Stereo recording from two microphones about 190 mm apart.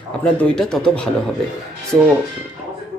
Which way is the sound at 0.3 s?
5° left (ahead or behind).